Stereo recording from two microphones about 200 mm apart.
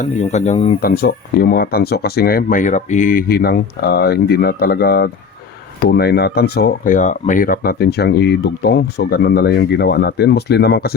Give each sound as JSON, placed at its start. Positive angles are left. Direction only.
{"t": 0.0, "sound": "speech", "side_deg": 35}
{"t": 0.8, "sound": "speech", "side_deg": 50}